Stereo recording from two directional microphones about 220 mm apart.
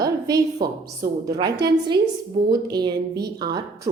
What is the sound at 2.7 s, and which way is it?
Speech, 20° right (ahead or behind).